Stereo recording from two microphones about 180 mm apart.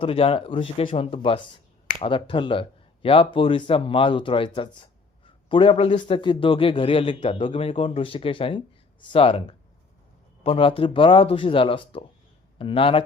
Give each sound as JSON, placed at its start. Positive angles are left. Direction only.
{"t": 0.0, "sound": "speech", "side_deg": 30}